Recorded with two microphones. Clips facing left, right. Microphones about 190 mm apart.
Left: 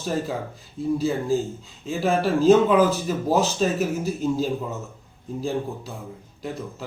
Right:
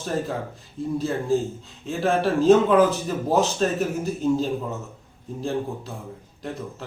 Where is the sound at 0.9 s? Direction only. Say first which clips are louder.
Right 1 dB; 5° left (ahead or behind).